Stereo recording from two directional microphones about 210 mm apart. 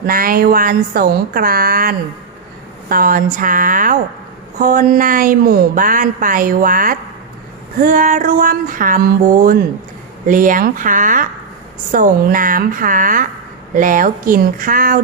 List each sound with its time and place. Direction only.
0.0 s a woman's voice: 45° right (ahead or behind)